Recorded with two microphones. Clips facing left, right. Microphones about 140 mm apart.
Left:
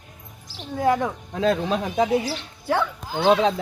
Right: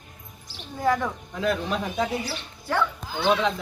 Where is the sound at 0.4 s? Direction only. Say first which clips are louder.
Left 7 dB; 90° left.